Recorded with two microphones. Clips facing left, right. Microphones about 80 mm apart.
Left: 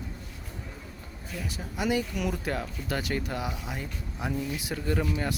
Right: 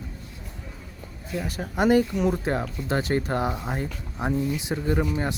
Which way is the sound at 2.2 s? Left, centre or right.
Right.